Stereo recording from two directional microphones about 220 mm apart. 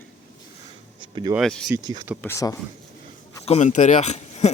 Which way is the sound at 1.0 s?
20° right (ahead or behind).